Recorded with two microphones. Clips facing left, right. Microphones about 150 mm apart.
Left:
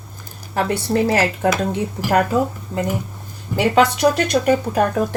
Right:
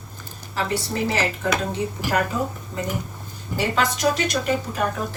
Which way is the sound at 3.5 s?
65° left (ahead or behind).